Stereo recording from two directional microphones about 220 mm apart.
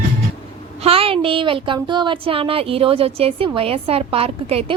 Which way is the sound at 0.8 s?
25° right (ahead or behind).